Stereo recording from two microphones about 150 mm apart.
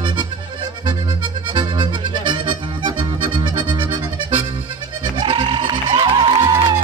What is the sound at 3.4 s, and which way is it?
Accordion, 30° right (ahead or behind).